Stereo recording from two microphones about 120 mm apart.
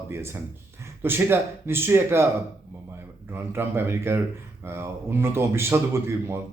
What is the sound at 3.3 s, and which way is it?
A man's voice, 20° right (ahead or behind).